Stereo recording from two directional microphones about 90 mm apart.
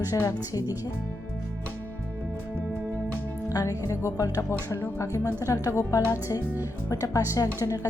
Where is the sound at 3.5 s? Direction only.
35° left (ahead or behind).